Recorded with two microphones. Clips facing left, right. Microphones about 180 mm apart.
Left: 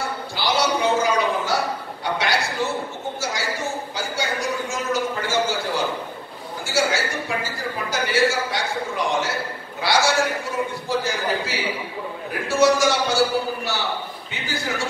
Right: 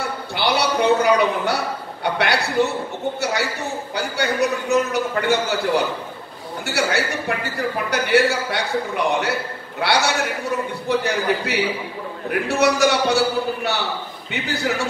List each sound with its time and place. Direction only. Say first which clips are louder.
0.4 s a sound: right 2 dB; 65° right (ahead or behind)
2.1 s a man's voice: right 5 dB; 65° right (ahead or behind)
3.9 s a man's voice: right 4 dB; 65° right (ahead or behind)
14.3 s a man's voice: right 5 dB; 65° right (ahead or behind)